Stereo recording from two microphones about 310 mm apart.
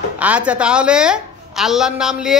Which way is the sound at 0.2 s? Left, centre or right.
Centre.